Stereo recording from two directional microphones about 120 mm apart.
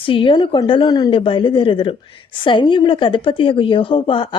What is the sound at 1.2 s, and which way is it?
A woman's voice, 45° left (ahead or behind).